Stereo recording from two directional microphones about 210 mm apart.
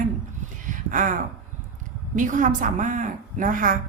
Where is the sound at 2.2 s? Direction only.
40° right (ahead or behind).